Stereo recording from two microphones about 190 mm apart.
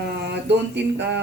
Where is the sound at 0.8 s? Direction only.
65° right (ahead or behind).